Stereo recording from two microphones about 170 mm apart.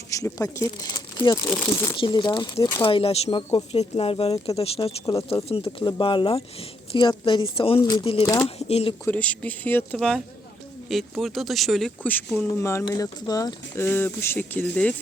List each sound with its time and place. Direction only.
0.1 s speech: 20° left (ahead or behind); by 9.0 s 35° left (ahead or behind)
9.0 s speech: 10° left (ahead or behind)